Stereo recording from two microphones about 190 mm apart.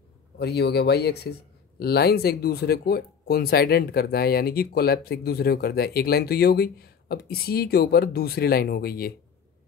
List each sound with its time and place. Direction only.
0.4 s speech: 60° left (ahead or behind)